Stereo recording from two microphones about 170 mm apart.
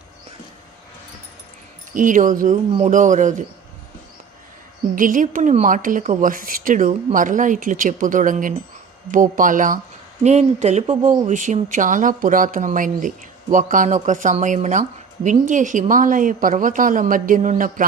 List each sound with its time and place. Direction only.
1.9 s speech: 50° right (ahead or behind)
4.9 s speech: 50° right (ahead or behind)